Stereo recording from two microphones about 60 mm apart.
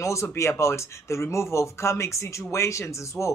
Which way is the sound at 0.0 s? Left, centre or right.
Left.